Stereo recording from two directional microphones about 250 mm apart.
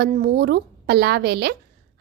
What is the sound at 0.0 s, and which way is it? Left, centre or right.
A woman's voice, right.